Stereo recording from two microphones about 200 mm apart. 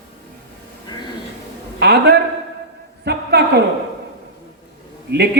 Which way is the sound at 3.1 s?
55° right (ahead or behind).